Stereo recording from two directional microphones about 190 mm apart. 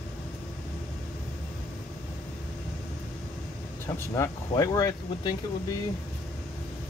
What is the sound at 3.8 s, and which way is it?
Speech, 15° left (ahead or behind).